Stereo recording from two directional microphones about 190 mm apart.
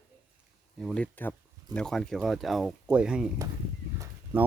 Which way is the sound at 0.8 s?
5° left (ahead or behind).